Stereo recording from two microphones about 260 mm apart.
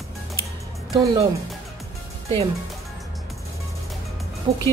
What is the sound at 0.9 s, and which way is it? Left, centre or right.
Speech, centre.